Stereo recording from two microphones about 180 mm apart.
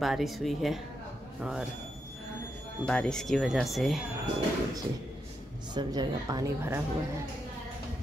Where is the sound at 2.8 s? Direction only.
5° left (ahead or behind).